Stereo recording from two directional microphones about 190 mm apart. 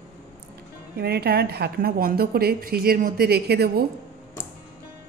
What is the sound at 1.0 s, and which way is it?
A woman's voice, 55° right (ahead or behind).